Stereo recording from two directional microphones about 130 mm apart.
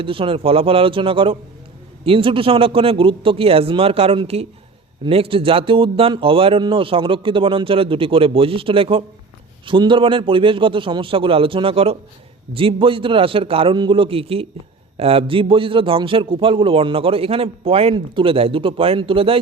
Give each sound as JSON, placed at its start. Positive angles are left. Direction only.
{"t": 0.0, "sound": "a man's voice", "side_deg": -45}